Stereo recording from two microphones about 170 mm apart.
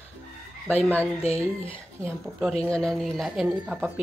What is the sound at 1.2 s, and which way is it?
Speech, 35° left (ahead or behind).